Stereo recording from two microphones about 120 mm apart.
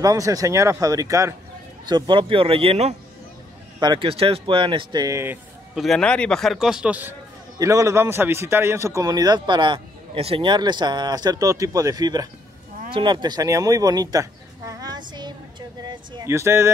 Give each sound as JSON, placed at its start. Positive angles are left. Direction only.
{"t": 0.0, "sound": "speech", "side_deg": -30}
{"t": 1.9, "sound": "a man's voice", "side_deg": -40}
{"t": 3.8, "sound": "a man's voice", "side_deg": -40}
{"t": 4.1, "sound": "a man's voice", "side_deg": -50}
{"t": 5.0, "sound": "speech", "side_deg": -20}
{"t": 5.8, "sound": "a man's voice", "side_deg": 5}
{"t": 7.5, "sound": "a man's voice", "side_deg": -25}
{"t": 14.7, "sound": "a sound", "side_deg": -35}
{"t": 16.3, "sound": "speech", "side_deg": -20}